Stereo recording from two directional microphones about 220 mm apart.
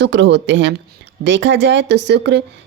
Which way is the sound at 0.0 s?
55° right (ahead or behind).